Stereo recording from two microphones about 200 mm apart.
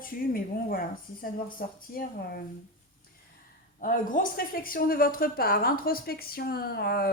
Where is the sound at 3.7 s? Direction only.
45° left (ahead or behind).